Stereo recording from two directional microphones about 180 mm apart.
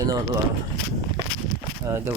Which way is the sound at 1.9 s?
15° right (ahead or behind).